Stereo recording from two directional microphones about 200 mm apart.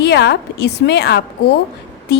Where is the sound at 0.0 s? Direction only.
55° left (ahead or behind).